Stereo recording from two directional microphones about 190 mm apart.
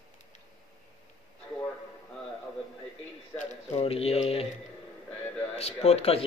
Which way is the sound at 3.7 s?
30° left (ahead or behind).